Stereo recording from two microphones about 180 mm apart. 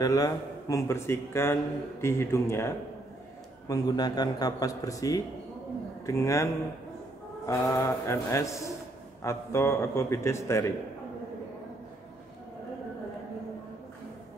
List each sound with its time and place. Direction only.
0.0 s a man's voice: 20° left (ahead or behind)